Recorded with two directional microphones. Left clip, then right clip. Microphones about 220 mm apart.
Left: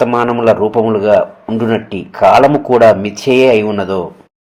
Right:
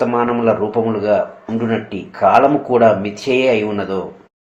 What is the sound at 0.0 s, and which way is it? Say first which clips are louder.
Speech: left 4 dB; 40° left (ahead or behind).